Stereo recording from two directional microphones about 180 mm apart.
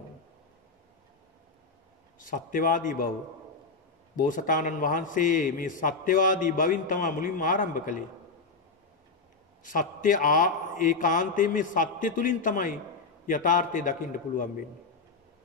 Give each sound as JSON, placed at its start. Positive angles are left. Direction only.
{"t": 2.1, "sound": "a man's voice", "side_deg": 50}
{"t": 4.2, "sound": "a man's voice", "side_deg": 50}
{"t": 9.6, "sound": "a man's voice", "side_deg": 50}